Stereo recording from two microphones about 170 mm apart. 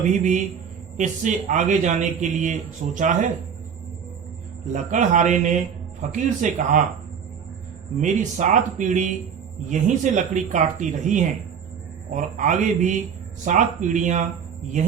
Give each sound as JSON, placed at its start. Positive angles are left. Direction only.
{"t": 0.0, "sound": "a man's voice", "side_deg": -45}
{"t": 4.6, "sound": "a man's voice", "side_deg": -45}
{"t": 8.0, "sound": "a man's voice", "side_deg": -45}